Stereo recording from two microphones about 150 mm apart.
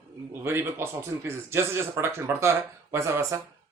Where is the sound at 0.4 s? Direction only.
15° right (ahead or behind).